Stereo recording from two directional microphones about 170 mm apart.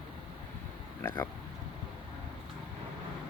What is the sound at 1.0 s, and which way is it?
Speech, 25° left (ahead or behind).